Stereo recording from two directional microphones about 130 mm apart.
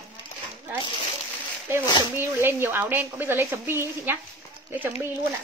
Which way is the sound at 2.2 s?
15° right (ahead or behind).